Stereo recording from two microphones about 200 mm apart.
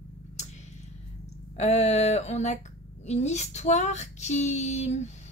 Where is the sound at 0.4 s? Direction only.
35° left (ahead or behind).